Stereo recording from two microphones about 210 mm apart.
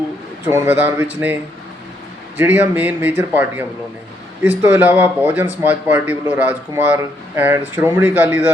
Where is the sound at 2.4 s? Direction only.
10° right (ahead or behind).